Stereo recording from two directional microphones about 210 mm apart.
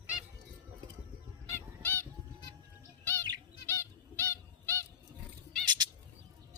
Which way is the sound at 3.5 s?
10° left (ahead or behind).